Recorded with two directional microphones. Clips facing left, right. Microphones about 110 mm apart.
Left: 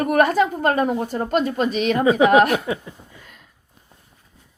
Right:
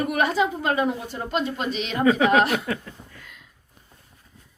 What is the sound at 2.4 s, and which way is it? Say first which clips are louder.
Speech: left 4 dB; 50° left (ahead or behind).